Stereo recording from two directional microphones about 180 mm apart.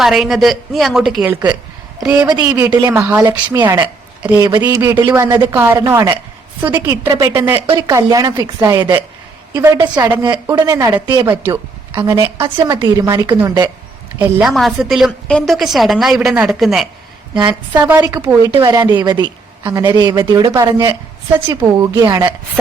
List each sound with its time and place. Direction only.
0.0 s a woman's voice: centre (ahead or behind)
2.2 s a woman's voice: 20° right (ahead or behind)
11.3 s a man's voice: 10° right (ahead or behind)
14.2 s a woman's voice: 5° right (ahead or behind)
18.5 s a woman's voice: 25° right (ahead or behind)